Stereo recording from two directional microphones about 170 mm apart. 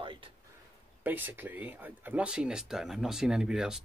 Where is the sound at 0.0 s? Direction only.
30° right (ahead or behind).